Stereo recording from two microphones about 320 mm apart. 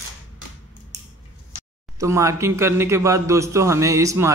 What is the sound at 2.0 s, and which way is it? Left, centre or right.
A man's voice, centre.